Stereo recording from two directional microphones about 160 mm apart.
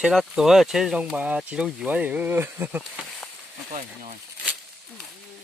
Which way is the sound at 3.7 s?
50° right (ahead or behind).